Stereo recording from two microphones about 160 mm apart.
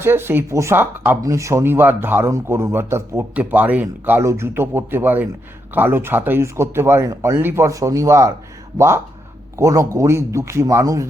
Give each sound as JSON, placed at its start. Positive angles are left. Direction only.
{"t": 0.0, "sound": "speech", "side_deg": -15}
{"t": 9.6, "sound": "speech", "side_deg": -20}